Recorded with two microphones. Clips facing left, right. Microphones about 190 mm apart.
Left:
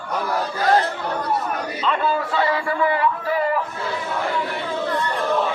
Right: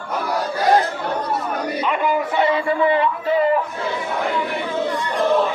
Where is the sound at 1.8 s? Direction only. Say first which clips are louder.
Right 1 dB; 15° right (ahead or behind).